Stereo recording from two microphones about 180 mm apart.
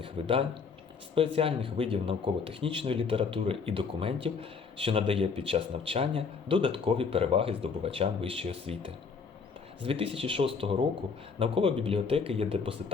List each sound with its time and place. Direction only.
0.0 s speech: 30° right (ahead or behind)